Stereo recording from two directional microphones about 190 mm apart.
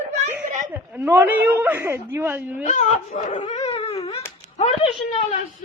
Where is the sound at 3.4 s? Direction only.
35° left (ahead or behind).